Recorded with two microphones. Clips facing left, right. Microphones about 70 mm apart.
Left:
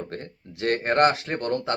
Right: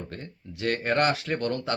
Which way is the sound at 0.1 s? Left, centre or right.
Left.